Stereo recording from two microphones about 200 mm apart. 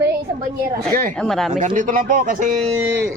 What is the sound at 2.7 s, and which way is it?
Speech, 10° right (ahead or behind).